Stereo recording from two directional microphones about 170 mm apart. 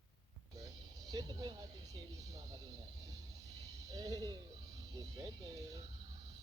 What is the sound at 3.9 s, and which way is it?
Speech, 20° right (ahead or behind).